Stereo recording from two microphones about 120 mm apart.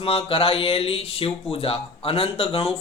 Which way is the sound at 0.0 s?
50° left (ahead or behind).